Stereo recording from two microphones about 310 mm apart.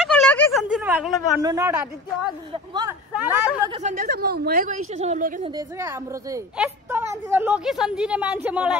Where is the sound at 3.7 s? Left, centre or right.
Right.